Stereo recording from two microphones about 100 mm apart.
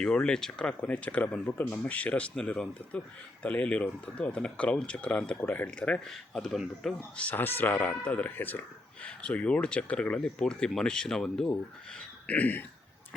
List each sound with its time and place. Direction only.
0.0 s speech: 10° left (ahead or behind)
7.2 s speech: 15° left (ahead or behind)